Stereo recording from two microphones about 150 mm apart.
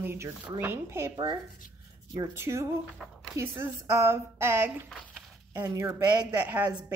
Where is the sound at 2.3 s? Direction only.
15° right (ahead or behind).